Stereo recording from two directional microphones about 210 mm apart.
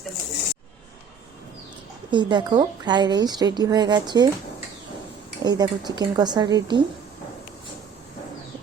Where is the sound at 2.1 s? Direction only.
20° right (ahead or behind).